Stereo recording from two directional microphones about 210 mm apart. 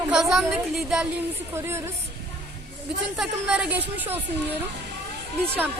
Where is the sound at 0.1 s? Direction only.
Centre (ahead or behind).